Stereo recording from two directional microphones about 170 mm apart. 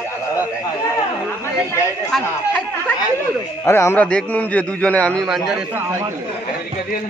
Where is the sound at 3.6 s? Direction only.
15° left (ahead or behind); by 5.8 s centre (ahead or behind).